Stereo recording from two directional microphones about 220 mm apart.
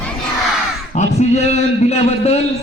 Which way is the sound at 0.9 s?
30° left (ahead or behind).